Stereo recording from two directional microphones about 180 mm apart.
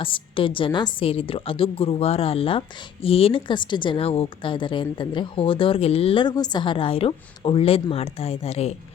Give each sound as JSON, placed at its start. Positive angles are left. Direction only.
{"t": 0.0, "sound": "a woman's voice", "side_deg": 30}